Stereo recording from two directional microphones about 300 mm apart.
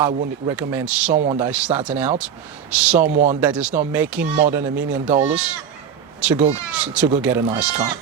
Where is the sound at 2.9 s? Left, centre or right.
Right.